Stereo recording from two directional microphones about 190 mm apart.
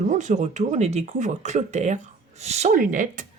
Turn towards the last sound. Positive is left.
turn(degrees=-45)  # may be behind; listen again after turning